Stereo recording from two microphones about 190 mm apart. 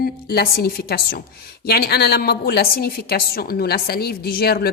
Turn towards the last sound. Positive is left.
turn(degrees=55)  # may be behind; listen again after turning